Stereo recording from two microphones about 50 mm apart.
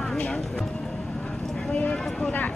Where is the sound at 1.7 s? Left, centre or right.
Left.